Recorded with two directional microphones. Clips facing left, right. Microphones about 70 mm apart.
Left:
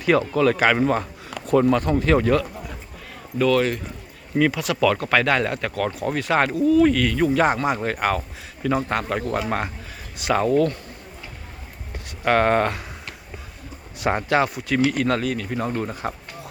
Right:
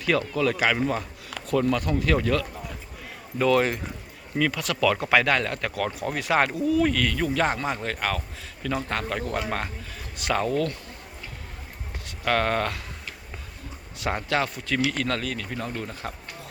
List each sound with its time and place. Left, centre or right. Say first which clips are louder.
0.0 s speech: left 5 dB; left
0.3 s speech: left 5 dB; left
1.7 s speech: left 5 dB; left
3.3 s speech: left 2 dB; right
4.5 s speech: left 3 dB; centre
4.9 s speech: left 1 dB; centre
5.2 s speech: left 3 dB; centre
10.5 s speech: left 7 dB; left
12.2 s speech: left 6 dB; left
14.0 s speech: left 6 dB; left
14.5 s speech: left 5 dB; centre